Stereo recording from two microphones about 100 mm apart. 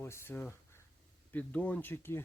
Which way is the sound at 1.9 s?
25° left (ahead or behind).